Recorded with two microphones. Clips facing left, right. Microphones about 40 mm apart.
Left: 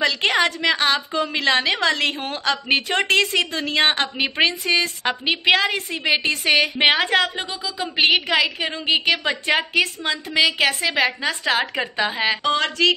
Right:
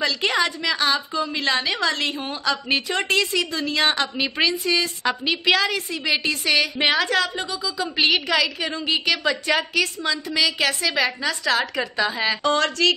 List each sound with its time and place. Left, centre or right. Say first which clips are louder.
0.2 s a woman's voice: left 3 dB; left
12.4 s speech: even; left